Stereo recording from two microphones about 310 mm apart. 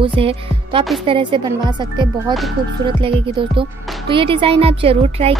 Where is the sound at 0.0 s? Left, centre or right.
Centre.